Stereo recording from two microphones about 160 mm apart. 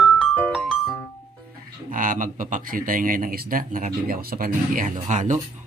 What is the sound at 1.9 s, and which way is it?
Speech, 55° right (ahead or behind).